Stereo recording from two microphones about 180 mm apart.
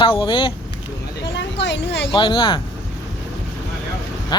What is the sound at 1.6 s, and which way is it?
Speech, 80° left.